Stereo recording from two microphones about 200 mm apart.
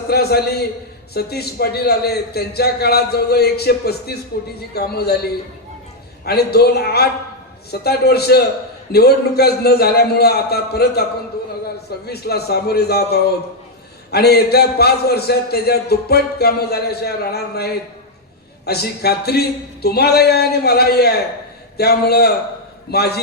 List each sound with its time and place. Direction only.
0.1 s a man's voice: 55° left (ahead or behind)
12.0 s a man's voice: 55° left (ahead or behind)